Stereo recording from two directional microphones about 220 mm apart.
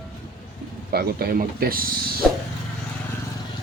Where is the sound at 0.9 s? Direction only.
45° right (ahead or behind).